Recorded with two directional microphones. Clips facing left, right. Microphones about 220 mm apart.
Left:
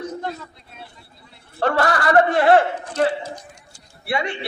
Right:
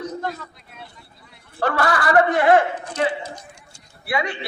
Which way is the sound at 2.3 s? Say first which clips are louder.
Left 1 dB; 30° left (ahead or behind).